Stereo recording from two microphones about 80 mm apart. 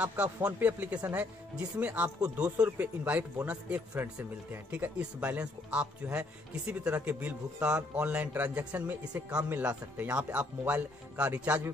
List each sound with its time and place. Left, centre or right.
0.0 s speech: centre